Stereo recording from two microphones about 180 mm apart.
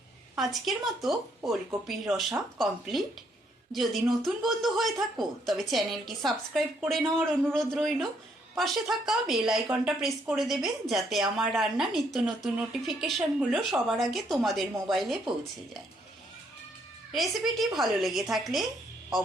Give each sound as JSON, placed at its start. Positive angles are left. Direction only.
{"t": 0.3, "sound": "a woman's voice", "side_deg": 0}
{"t": 7.0, "sound": "a man's voice", "side_deg": -10}
{"t": 7.5, "sound": "a woman's voice", "side_deg": 0}
{"t": 17.1, "sound": "a woman's voice", "side_deg": 0}